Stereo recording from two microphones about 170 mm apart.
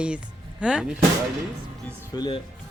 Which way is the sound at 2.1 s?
25° left (ahead or behind).